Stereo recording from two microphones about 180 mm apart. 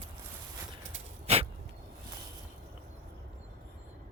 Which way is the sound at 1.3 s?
35° right (ahead or behind).